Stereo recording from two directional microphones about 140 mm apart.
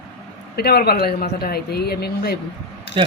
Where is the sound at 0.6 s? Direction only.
90° left.